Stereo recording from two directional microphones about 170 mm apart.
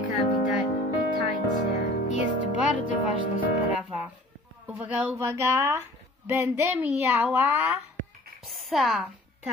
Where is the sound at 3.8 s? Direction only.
5° right (ahead or behind).